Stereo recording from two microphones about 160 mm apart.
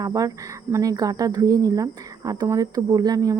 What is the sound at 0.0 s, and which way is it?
Speech, 20° right (ahead or behind).